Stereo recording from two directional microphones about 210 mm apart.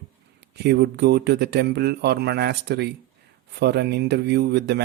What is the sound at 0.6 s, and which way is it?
Speech, 55° right (ahead or behind).